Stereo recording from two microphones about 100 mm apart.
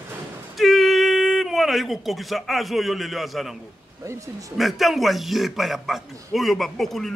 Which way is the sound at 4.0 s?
30° right (ahead or behind).